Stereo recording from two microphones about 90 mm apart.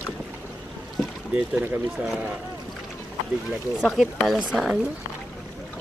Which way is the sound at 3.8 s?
Centre (ahead or behind).